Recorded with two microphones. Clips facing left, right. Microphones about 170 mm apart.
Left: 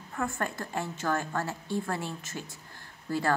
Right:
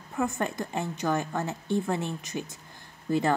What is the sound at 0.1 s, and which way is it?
Speech, 20° right (ahead or behind).